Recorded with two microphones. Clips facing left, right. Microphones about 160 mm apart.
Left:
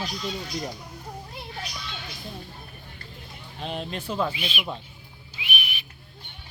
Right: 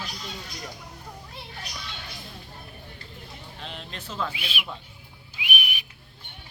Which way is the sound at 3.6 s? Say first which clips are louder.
Left 9 dB; 15° left (ahead or behind).